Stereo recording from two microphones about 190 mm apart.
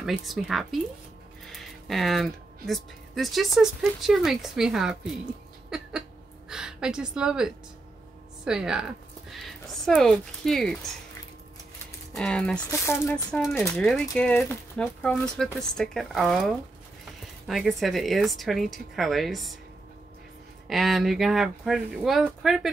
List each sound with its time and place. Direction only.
0.0 s speech: centre (ahead or behind)
5.7 s a sound: 5° right (ahead or behind)
6.5 s a woman's voice: 5° right (ahead or behind)
12.2 s speech: 5° left (ahead or behind)
12.6 s speech: 15° left (ahead or behind)
13.4 s speech: centre (ahead or behind)
20.6 s speech: centre (ahead or behind)